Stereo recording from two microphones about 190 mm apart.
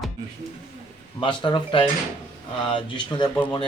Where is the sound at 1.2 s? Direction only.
25° left (ahead or behind).